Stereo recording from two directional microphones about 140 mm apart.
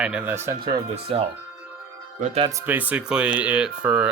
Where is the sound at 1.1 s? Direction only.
45° right (ahead or behind).